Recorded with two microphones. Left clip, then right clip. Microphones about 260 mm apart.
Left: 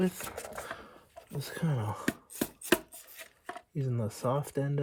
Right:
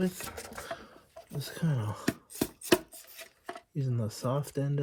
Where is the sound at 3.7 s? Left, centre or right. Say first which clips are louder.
Left 1 dB; left.